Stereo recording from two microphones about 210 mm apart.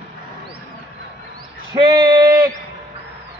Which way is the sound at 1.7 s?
20° right (ahead or behind).